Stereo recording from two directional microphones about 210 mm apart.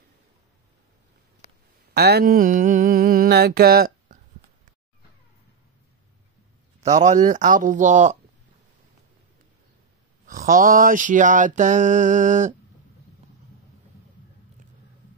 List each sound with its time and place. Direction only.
2.0 s a sound: 50° right (ahead or behind)
6.8 s mantra: 35° right (ahead or behind)
10.2 s mantra: 40° right (ahead or behind)